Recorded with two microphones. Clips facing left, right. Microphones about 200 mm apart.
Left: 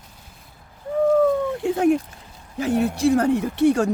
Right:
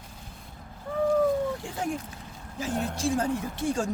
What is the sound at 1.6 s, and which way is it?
Speech, 65° left (ahead or behind).